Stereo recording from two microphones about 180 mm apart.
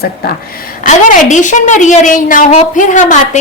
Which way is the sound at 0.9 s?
45° left (ahead or behind).